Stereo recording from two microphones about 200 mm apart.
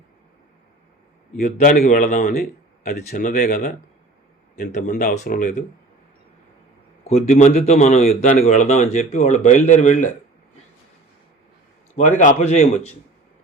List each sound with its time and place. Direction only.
1.4 s speech: 40° left (ahead or behind)
7.1 s speech: 35° left (ahead or behind)
11.9 s speech: 40° left (ahead or behind)